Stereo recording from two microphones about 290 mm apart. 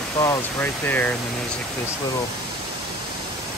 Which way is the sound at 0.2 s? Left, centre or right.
Centre.